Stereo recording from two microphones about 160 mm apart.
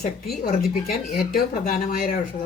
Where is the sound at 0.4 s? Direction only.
70° left (ahead or behind).